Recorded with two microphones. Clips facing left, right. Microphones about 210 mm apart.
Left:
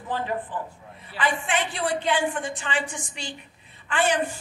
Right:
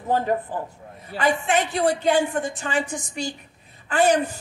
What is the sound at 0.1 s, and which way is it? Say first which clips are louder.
A man's voice: right 6 dB; 45° right (ahead or behind).